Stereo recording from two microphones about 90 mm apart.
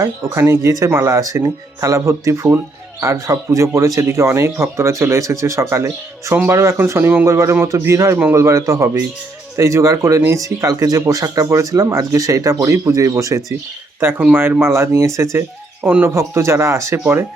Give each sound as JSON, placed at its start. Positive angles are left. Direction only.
{"t": 0.3, "sound": "speech", "side_deg": -30}
{"t": 16.1, "sound": "speech", "side_deg": -30}